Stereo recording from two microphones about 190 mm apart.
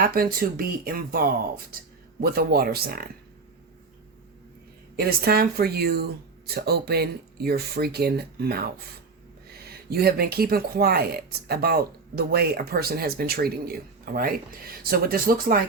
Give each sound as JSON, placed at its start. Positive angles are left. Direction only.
{"t": 0.1, "sound": "speech", "side_deg": -50}
{"t": 4.9, "sound": "speech", "side_deg": -55}